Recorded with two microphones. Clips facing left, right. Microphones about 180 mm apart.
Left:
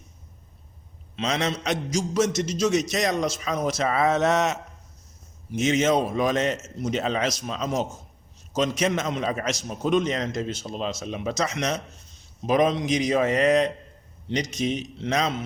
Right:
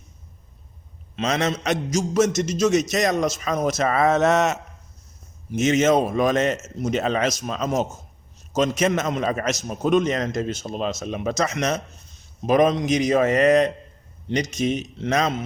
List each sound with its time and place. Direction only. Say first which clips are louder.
1.1 s a man's voice: right 3 dB; 50° right (ahead or behind)